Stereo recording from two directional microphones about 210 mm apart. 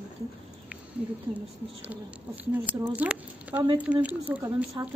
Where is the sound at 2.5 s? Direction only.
10° right (ahead or behind).